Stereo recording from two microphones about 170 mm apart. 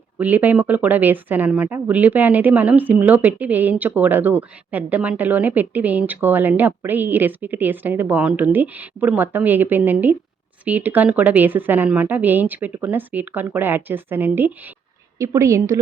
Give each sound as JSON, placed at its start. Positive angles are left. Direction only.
{"t": 0.2, "sound": "speech", "side_deg": -10}